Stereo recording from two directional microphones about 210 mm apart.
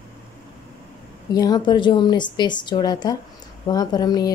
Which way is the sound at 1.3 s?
20° left (ahead or behind).